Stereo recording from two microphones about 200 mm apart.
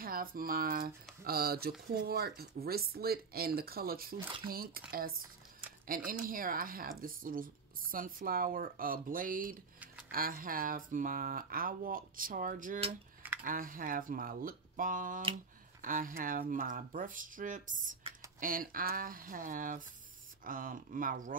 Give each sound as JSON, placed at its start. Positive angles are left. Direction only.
{"t": 0.0, "sound": "speech", "side_deg": -45}
{"t": 5.9, "sound": "speech", "side_deg": -45}